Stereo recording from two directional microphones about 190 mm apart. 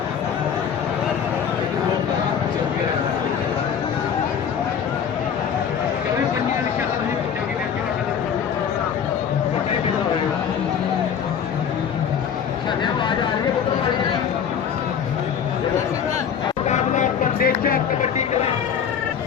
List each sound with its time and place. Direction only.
16.6 s music: 40° left (ahead or behind)